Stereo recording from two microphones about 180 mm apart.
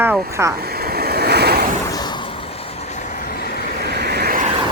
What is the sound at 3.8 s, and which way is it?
Vehicle, 65° right (ahead or behind).